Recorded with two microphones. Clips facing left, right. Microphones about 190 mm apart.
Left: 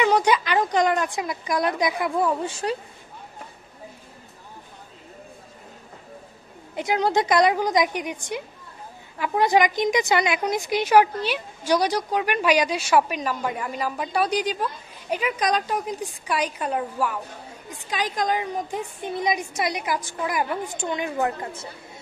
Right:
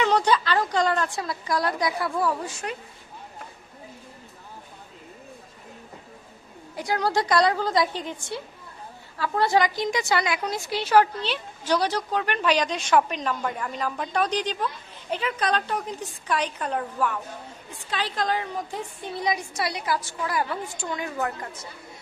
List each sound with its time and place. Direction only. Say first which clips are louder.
0.0 s a woman's voice: left 2 dB; 15° left (ahead or behind); by 2.8 s 30° left (ahead or behind)
6.7 s a woman's voice: left 3 dB; 20° left (ahead or behind)